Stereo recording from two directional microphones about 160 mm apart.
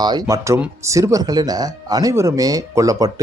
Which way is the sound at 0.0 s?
25° right (ahead or behind).